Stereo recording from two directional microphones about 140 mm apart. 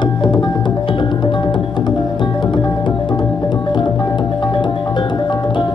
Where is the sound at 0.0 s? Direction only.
35° left (ahead or behind).